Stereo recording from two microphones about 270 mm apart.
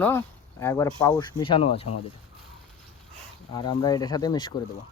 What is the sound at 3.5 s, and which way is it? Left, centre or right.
Speech, centre.